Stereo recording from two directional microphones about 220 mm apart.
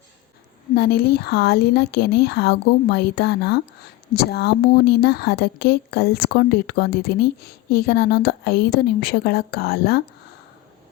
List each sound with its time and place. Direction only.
0.8 s speech: 45° left (ahead or behind)